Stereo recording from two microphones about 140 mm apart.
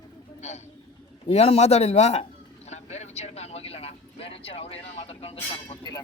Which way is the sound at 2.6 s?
50° left (ahead or behind).